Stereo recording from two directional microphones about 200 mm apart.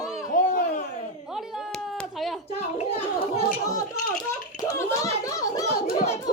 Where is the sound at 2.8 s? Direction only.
30° left (ahead or behind).